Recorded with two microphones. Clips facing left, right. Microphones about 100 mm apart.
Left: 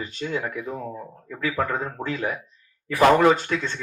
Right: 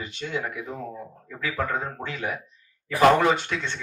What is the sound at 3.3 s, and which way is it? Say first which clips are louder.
Speech: left 3 dB; 40° left (ahead or behind).